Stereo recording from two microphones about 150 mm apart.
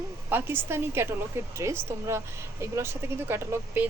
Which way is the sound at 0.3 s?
15° right (ahead or behind).